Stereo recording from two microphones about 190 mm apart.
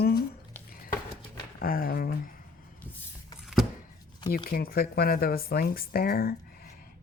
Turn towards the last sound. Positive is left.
turn(degrees=55)  # may be behind; listen again after turning